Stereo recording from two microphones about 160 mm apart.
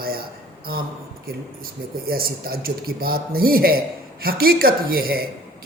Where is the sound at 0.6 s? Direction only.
65° right (ahead or behind).